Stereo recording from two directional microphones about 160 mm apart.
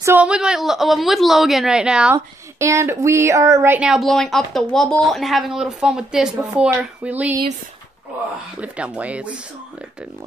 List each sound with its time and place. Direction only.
0.0 s a woman's voice: 10° right (ahead or behind)
2.1 s a woman's voice: 20° right (ahead or behind)
8.5 s speech: 10° right (ahead or behind)